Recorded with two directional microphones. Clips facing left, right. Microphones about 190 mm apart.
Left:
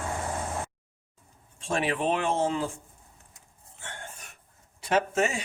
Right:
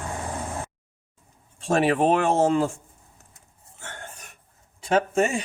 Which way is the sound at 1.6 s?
40° right (ahead or behind).